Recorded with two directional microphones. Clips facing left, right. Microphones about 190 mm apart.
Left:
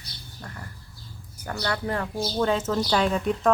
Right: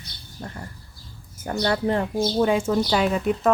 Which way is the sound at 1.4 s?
25° right (ahead or behind).